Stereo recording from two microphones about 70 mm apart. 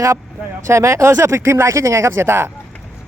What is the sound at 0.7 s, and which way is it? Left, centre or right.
Speech, right.